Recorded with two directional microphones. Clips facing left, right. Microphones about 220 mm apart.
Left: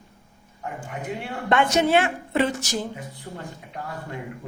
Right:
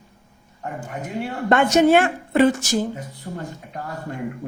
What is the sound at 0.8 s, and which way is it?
A woman's voice, 40° right (ahead or behind).